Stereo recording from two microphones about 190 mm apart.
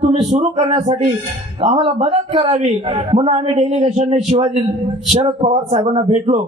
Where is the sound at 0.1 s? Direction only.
35° right (ahead or behind).